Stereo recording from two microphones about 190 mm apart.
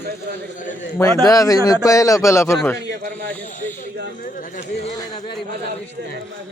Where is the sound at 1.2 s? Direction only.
20° left (ahead or behind).